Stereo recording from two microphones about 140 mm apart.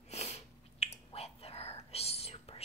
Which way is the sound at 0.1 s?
50° left (ahead or behind).